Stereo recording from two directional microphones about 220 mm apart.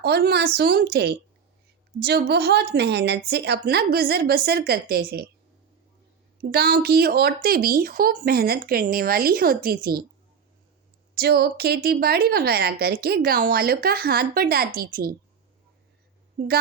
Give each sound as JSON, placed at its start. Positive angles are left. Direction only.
{"t": 0.0, "sound": "a woman's voice", "side_deg": -45}
{"t": 6.4, "sound": "a woman's voice", "side_deg": -45}
{"t": 11.1, "sound": "a woman's voice", "side_deg": -45}
{"t": 16.4, "sound": "speech", "side_deg": -40}